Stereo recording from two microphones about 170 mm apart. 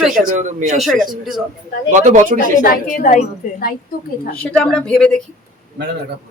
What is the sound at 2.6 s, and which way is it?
A woman's voice, 50° left (ahead or behind).